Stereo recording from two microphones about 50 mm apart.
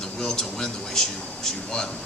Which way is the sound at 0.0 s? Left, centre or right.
Centre.